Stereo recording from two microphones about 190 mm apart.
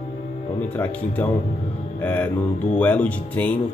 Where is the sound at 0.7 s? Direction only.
10° left (ahead or behind).